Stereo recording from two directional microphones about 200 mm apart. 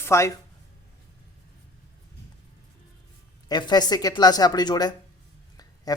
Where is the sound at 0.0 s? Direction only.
15° left (ahead or behind).